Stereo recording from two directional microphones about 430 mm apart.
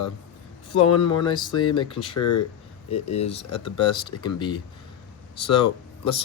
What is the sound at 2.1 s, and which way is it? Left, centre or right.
Speech, left.